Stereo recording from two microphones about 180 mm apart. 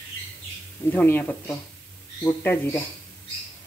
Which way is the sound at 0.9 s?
10° left (ahead or behind).